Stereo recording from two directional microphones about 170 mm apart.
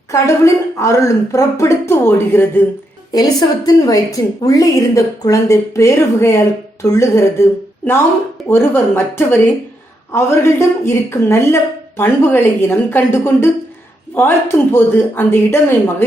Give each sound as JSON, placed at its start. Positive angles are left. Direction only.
{"t": 0.1, "sound": "a woman's voice", "side_deg": 15}
{"t": 3.1, "sound": "a woman's voice", "side_deg": 25}
{"t": 8.4, "sound": "a woman's voice", "side_deg": 15}